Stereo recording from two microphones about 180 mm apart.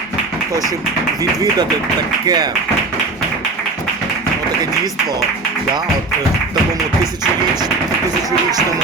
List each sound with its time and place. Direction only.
2.2 s speech: 25° right (ahead or behind)